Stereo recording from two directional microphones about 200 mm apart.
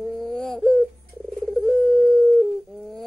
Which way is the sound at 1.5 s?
Centre (ahead or behind).